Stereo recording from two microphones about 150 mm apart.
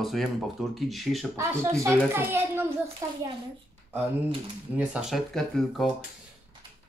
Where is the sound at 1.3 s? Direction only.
20° right (ahead or behind).